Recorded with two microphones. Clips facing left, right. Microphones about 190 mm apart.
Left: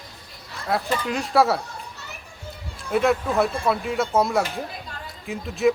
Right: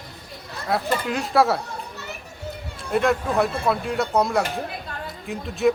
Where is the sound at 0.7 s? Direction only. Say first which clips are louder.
Right 1 dB; centre (ahead or behind).